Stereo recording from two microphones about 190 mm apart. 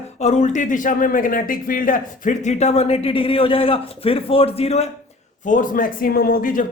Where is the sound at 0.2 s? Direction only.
35° left (ahead or behind).